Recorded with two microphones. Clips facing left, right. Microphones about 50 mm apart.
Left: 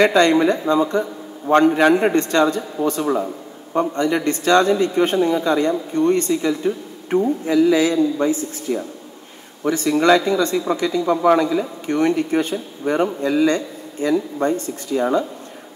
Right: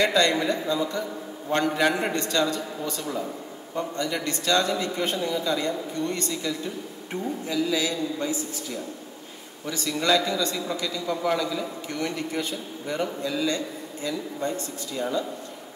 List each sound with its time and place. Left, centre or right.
0.0 s speech: left